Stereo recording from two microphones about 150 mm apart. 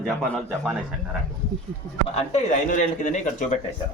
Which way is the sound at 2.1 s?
50° left (ahead or behind).